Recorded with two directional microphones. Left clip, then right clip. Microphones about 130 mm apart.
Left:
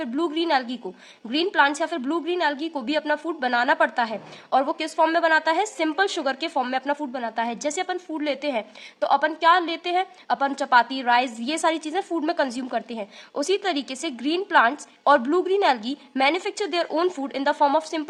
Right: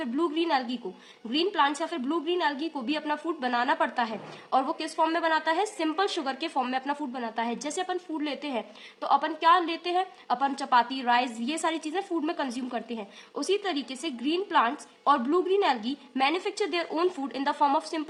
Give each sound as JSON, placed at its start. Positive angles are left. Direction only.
{"t": 0.0, "sound": "a woman's voice", "side_deg": 30}
{"t": 1.3, "sound": "a woman's voice", "side_deg": 45}